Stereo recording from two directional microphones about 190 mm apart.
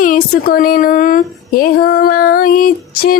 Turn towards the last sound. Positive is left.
turn(degrees=50)  # may be behind; listen again after turning